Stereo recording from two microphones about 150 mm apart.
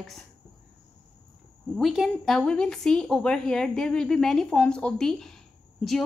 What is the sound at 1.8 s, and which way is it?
A woman's voice, centre (ahead or behind).